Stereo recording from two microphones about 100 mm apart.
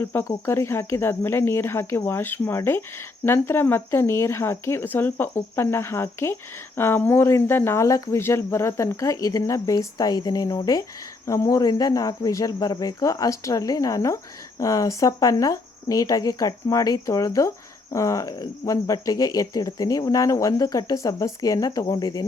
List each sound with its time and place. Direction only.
0.0 s speech: 20° left (ahead or behind); by 22.3 s 40° left (ahead or behind)